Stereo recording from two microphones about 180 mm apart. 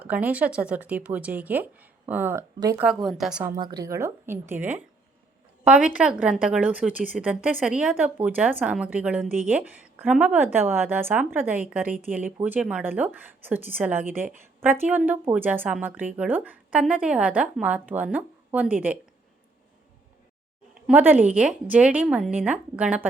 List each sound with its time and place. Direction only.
0.0 s speech: 10° right (ahead or behind)
3.5 s speech: 25° right (ahead or behind)
20.8 s speech: 10° right (ahead or behind)